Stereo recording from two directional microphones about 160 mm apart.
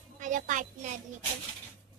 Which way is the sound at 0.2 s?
50° right (ahead or behind).